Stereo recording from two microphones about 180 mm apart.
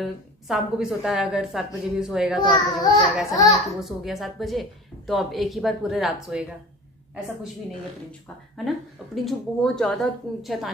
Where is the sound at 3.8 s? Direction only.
Centre (ahead or behind).